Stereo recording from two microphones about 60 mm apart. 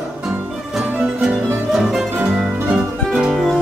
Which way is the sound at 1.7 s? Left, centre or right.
Centre.